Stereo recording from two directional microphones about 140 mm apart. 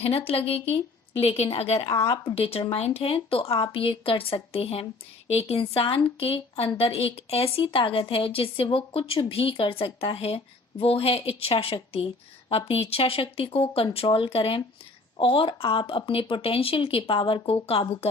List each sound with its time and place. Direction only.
0.3 s a woman's voice: 45° left (ahead or behind)